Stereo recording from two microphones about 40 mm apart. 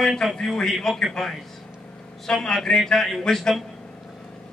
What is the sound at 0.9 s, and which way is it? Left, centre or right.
Speech, centre.